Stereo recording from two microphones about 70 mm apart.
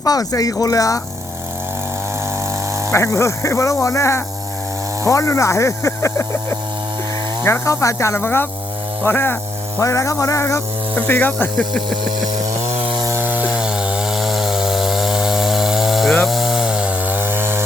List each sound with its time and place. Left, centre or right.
0.0 s speech: left
2.9 s speech: left
7.7 s speech: left
9.8 s speech: left
10.9 s speech: left
11.5 s a sound: centre
13.1 s chainsaw: right
13.5 s chainsaw: centre; by 17.6 s right